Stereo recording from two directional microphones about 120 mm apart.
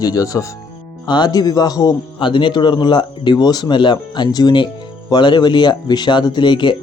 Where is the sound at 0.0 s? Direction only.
30° left (ahead or behind).